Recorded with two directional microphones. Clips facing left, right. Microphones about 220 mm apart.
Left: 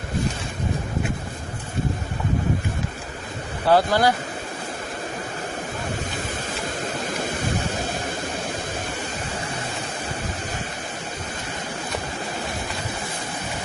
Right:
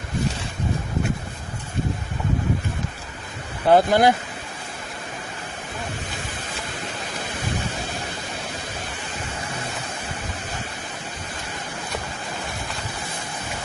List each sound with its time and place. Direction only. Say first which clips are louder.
3.7 s speech: right 2 dB; 20° right (ahead or behind)